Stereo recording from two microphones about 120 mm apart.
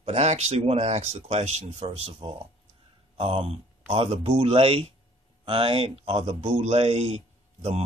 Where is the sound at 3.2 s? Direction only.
55° right (ahead or behind).